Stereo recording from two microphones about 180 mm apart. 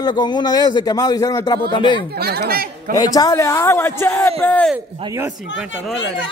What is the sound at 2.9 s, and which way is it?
A man's voice, 20° left (ahead or behind).